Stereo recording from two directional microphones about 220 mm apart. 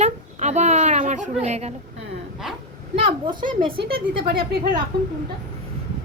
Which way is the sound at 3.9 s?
45° right (ahead or behind).